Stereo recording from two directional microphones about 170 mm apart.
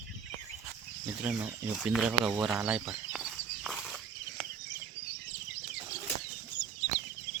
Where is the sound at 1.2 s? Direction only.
10° right (ahead or behind).